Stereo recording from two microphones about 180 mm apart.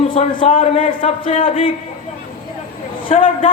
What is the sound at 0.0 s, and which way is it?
A man's voice, 30° left (ahead or behind).